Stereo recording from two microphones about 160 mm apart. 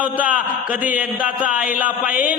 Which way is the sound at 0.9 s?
10° right (ahead or behind).